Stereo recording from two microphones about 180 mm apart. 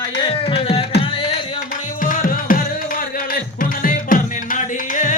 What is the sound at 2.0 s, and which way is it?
Music, 50° left (ahead or behind).